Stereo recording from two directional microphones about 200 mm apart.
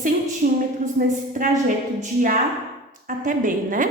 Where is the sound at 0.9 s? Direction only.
40° right (ahead or behind).